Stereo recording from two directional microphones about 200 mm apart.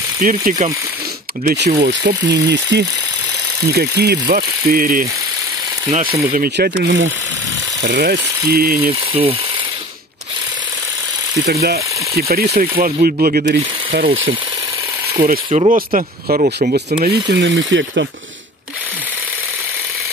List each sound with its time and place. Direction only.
0.2 s speech: 45° right (ahead or behind)
6.3 s speech: 50° right (ahead or behind)
9.1 s a sound: 30° right (ahead or behind)
11.6 s speech: 50° right (ahead or behind)
15.2 s speech: 45° right (ahead or behind)
16.7 s speech: 50° right (ahead or behind); by 18.0 s 70° right (ahead or behind)